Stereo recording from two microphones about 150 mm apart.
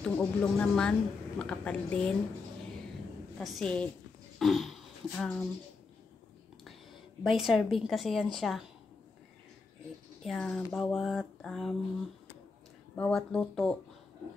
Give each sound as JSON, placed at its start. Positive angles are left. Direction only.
{"t": 0.0, "sound": "a woman's voice", "side_deg": 5}
{"t": 3.3, "sound": "speech", "side_deg": 5}
{"t": 7.2, "sound": "speech", "side_deg": 0}
{"t": 10.2, "sound": "speech", "side_deg": 5}
{"t": 12.9, "sound": "speech", "side_deg": 5}